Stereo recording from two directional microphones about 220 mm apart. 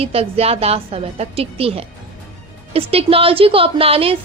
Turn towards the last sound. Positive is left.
turn(degrees=-25)  # may be behind; listen again after turning